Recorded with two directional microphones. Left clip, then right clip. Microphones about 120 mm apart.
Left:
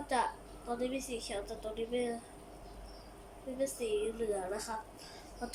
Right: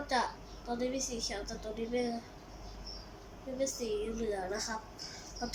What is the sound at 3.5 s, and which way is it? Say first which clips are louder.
Speech: right 1 dB; 15° left (ahead or behind).